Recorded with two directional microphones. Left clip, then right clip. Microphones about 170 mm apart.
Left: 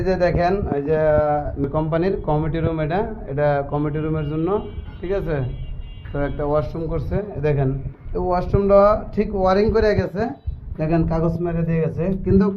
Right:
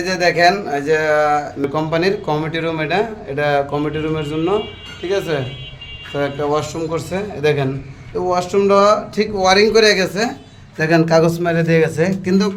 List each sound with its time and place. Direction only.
0.0 s speech: 10° right (ahead or behind)
10.8 s a man's voice: 35° right (ahead or behind)